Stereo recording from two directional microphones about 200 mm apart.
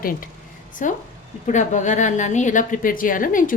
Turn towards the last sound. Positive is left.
turn(degrees=40)  # may be behind; listen again after turning